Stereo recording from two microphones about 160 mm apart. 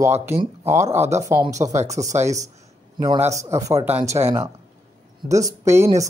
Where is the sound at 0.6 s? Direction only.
15° right (ahead or behind).